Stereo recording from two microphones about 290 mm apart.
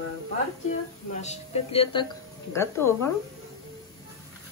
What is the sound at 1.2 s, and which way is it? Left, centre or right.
Speech, left.